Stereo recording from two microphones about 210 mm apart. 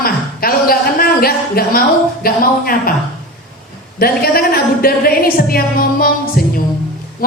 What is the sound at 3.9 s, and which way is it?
A woman's voice, 45° left (ahead or behind).